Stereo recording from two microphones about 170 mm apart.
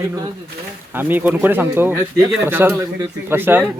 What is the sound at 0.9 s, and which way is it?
Speech, 10° right (ahead or behind).